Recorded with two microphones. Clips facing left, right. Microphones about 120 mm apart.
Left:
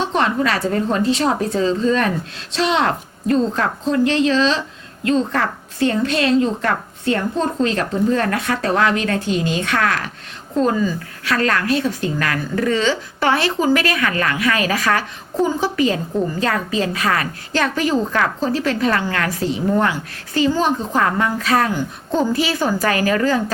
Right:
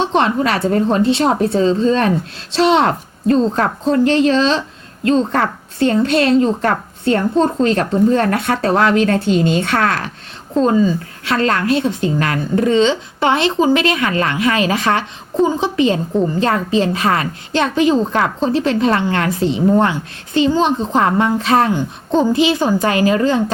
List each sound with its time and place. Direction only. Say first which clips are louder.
0.0 s a woman's voice: right 3 dB; 30° right (ahead or behind)